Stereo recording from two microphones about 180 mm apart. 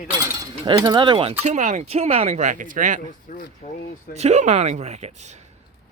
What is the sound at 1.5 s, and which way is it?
Speech, 40° right (ahead or behind).